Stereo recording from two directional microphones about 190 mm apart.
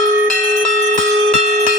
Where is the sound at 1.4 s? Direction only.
40° right (ahead or behind).